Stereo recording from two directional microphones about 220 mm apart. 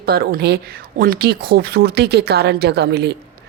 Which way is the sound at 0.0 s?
45° right (ahead or behind).